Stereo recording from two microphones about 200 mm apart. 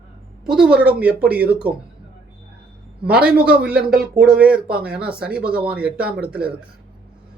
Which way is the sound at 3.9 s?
50° right (ahead or behind).